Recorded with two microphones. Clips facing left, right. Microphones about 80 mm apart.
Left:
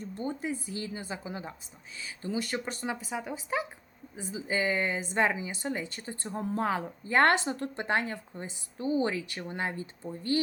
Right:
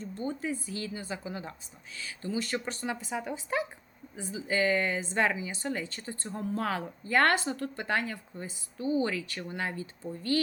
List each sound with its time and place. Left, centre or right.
0.2 s a woman's voice: left
4.3 s a woman's voice: centre